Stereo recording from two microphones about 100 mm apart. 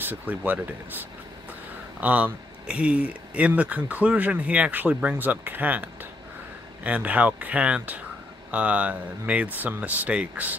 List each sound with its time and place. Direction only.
0.0 s speech: 20° right (ahead or behind)